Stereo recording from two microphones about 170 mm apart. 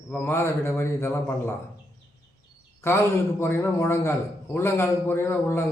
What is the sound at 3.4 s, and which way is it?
A man's voice, 15° left (ahead or behind).